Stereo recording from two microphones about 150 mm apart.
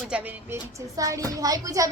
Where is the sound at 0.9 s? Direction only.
20° right (ahead or behind).